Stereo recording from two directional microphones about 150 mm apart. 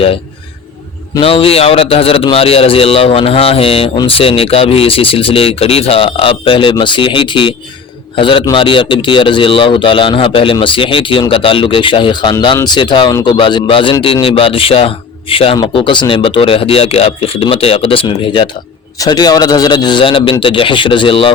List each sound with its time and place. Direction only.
1.2 s a man's voice: 40° left (ahead or behind)